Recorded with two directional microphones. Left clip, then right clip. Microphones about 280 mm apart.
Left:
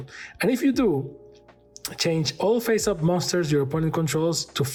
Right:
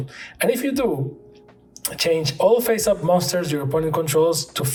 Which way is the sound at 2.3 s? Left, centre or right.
Left.